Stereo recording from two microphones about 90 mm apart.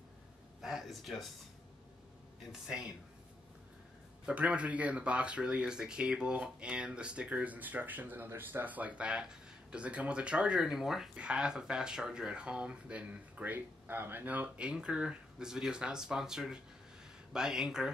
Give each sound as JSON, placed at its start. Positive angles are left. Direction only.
{"t": 0.6, "sound": "a sound", "side_deg": -5}
{"t": 2.6, "sound": "speech", "side_deg": -10}
{"t": 4.3, "sound": "speech", "side_deg": -15}